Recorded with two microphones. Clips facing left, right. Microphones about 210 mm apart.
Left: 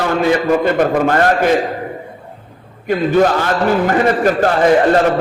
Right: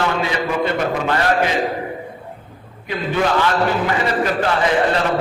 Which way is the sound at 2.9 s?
45° left (ahead or behind).